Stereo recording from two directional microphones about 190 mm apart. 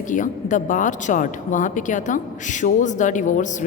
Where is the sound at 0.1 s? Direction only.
40° left (ahead or behind).